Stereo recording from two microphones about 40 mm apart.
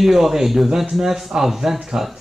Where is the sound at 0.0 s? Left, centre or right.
Centre.